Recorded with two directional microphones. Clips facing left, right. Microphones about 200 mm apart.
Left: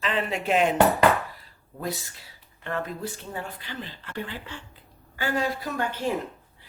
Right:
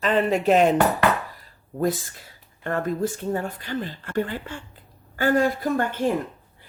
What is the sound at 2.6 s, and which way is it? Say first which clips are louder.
Speech: right 7 dB; 45° right (ahead or behind).